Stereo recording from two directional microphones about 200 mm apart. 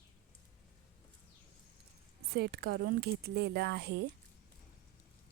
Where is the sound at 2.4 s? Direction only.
50° right (ahead or behind).